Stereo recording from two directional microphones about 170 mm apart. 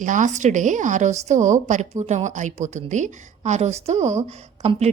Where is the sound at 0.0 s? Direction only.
50° right (ahead or behind).